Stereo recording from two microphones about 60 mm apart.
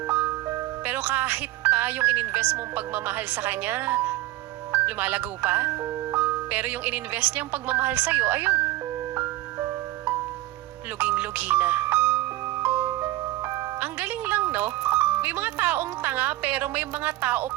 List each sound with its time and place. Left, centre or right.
0.1 s speech: right
9.1 s music: right
11.0 s speech: right
12.6 s music: right
12.9 s music: right
13.7 s music: right